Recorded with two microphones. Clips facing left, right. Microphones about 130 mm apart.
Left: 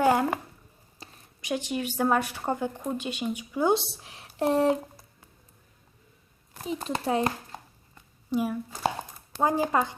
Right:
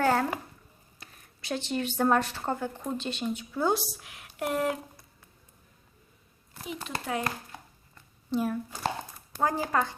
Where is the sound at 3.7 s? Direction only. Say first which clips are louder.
Left 4 dB; 25° left (ahead or behind).